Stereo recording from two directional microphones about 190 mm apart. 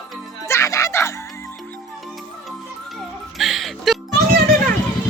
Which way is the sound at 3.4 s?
Centre (ahead or behind).